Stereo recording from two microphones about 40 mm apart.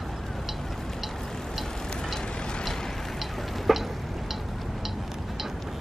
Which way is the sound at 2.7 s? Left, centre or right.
Centre.